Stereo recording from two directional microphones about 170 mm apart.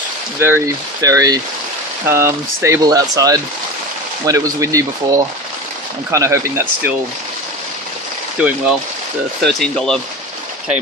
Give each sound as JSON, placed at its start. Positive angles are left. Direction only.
{"t": 0.4, "sound": "speech", "side_deg": -15}
{"t": 8.4, "sound": "speech", "side_deg": -5}
{"t": 9.4, "sound": "speech", "side_deg": 5}